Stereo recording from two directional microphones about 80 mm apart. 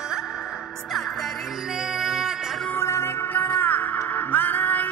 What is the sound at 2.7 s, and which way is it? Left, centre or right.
Music, left.